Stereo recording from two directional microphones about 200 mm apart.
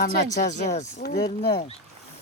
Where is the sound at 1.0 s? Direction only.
50° left (ahead or behind).